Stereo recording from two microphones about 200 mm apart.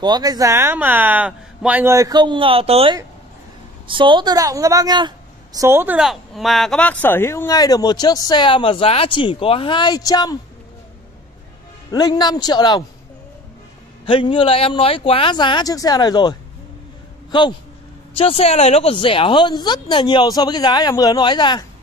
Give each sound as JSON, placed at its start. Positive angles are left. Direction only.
{"t": 0.0, "sound": "a woman's voice", "side_deg": -20}
{"t": 11.9, "sound": "speech", "side_deg": 20}
{"t": 14.0, "sound": "a man's voice", "side_deg": 25}